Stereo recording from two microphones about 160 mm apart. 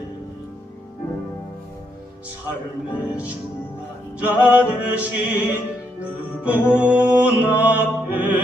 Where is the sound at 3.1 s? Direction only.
10° right (ahead or behind).